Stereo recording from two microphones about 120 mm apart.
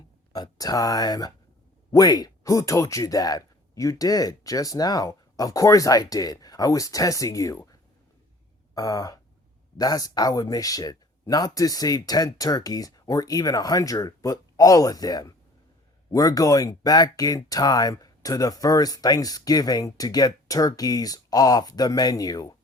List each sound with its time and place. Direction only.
0.3 s speech: 35° left (ahead or behind)
8.7 s a sound: 30° left (ahead or behind)
9.7 s speech: 30° left (ahead or behind)